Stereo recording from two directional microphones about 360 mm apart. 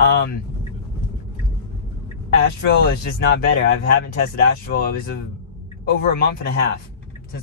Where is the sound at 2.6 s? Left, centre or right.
Left.